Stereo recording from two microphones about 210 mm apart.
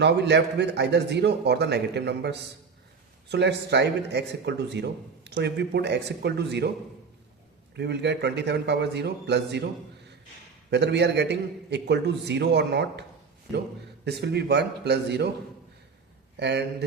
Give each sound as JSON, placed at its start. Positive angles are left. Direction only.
{"t": 0.0, "sound": "speech", "side_deg": -55}
{"t": 7.8, "sound": "speech", "side_deg": -55}
{"t": 10.7, "sound": "a man's voice", "side_deg": -55}
{"t": 16.4, "sound": "speech", "side_deg": -55}